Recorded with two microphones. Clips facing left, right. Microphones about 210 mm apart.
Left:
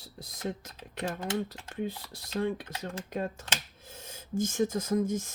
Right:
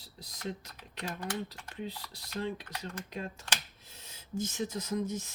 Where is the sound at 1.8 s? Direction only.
50° left (ahead or behind).